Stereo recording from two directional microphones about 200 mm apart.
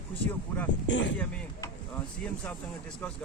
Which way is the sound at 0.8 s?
65° left (ahead or behind).